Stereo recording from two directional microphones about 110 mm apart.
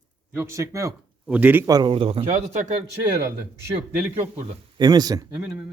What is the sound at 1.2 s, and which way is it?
Speech, 15° right (ahead or behind).